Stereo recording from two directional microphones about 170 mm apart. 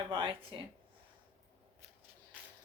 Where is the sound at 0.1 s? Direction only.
30° right (ahead or behind).